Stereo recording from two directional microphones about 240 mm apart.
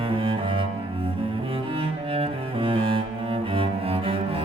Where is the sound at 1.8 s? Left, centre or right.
Right.